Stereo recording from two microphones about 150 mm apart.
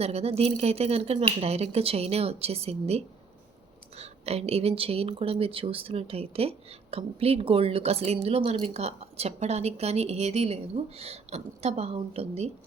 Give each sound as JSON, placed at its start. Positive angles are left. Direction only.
{"t": 0.0, "sound": "speech", "side_deg": -40}